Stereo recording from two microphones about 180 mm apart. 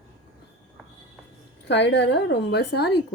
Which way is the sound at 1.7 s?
75° left (ahead or behind).